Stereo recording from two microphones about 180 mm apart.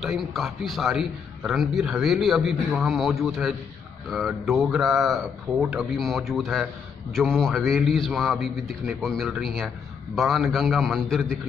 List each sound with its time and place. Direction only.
0.0 s a man's voice: centre (ahead or behind)